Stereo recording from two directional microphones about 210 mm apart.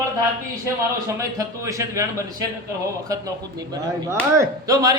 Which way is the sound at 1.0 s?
15° right (ahead or behind).